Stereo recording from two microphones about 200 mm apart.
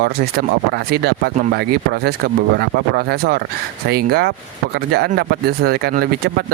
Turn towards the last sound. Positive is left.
turn(degrees=-50)  # may be behind; listen again after turning